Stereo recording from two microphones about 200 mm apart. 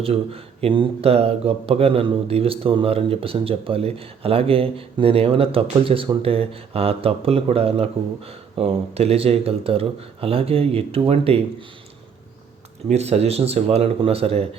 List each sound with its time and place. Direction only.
0.0 s speech: 30° right (ahead or behind)
12.9 s speech: 30° right (ahead or behind)